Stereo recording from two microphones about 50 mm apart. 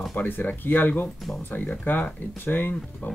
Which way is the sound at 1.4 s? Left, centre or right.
Left.